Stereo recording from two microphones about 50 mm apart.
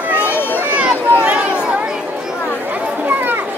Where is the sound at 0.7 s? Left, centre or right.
Right.